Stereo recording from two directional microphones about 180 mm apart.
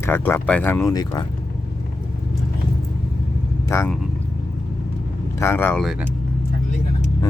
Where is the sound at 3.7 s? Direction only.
15° left (ahead or behind).